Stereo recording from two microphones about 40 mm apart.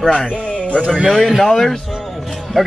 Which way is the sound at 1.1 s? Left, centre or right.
Centre.